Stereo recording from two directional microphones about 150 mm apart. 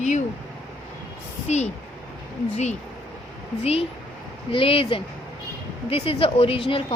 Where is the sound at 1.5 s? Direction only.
50° left (ahead or behind).